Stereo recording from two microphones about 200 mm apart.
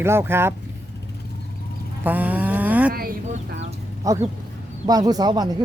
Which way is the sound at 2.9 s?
50° right (ahead or behind).